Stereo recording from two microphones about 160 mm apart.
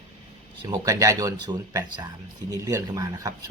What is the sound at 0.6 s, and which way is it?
Speech, 20° right (ahead or behind).